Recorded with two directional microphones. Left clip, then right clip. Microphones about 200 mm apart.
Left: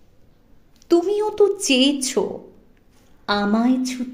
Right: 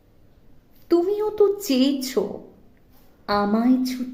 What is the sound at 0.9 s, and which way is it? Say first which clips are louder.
A woman's voice: left 2 dB; 30° left (ahead or behind).